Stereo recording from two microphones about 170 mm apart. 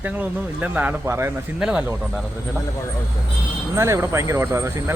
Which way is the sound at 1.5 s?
5° right (ahead or behind).